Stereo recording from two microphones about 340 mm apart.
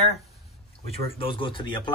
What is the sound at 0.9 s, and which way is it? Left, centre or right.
Speech, centre.